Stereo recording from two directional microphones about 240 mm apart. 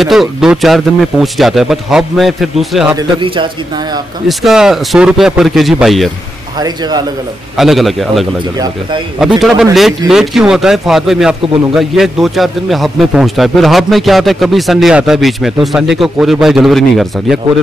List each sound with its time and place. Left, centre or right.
0.0 s speech: centre
3.0 s a man's voice: centre
4.3 s speech: centre
7.5 s speech: centre
9.4 s speech: centre